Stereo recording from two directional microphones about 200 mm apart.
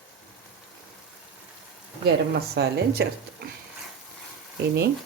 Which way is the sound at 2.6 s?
55° right (ahead or behind).